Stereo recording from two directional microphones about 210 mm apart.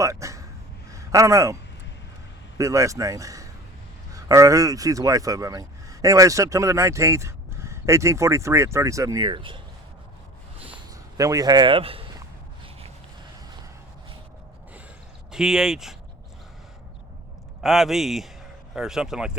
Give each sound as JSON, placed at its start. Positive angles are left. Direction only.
{"t": 0.0, "sound": "a sound", "side_deg": -15}
{"t": 2.6, "sound": "speech", "side_deg": -15}
{"t": 11.2, "sound": "speech", "side_deg": -15}
{"t": 15.3, "sound": "speech", "side_deg": 0}
{"t": 17.6, "sound": "speech", "side_deg": 0}